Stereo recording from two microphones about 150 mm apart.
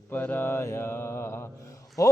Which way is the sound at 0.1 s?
15° left (ahead or behind).